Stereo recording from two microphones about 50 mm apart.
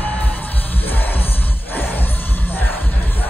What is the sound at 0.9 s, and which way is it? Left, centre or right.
Music, left.